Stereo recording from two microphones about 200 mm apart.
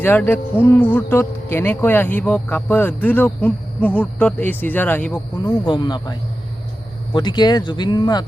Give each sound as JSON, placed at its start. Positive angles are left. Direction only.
{"t": 0.0, "sound": "speech", "side_deg": 10}
{"t": 5.4, "sound": "speech", "side_deg": 20}